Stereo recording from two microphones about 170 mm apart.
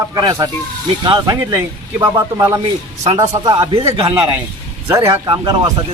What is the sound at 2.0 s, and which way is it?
Speech, 15° right (ahead or behind).